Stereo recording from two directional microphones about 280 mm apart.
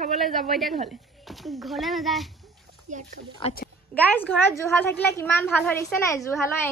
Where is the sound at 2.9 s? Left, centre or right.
Right.